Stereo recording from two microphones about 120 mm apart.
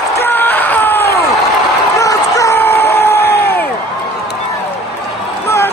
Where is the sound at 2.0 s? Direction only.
25° left (ahead or behind).